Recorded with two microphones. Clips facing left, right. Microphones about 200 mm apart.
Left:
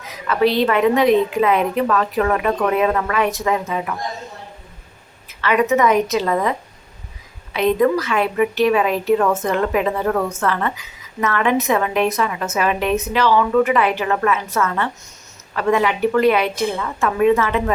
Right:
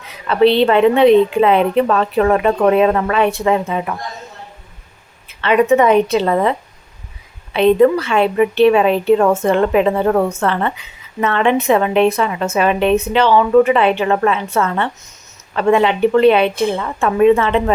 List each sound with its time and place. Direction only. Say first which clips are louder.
0.3 s a woman's voice: right 5 dB; 30° right (ahead or behind)
5.4 s a woman's voice: right 4 dB; 30° right (ahead or behind)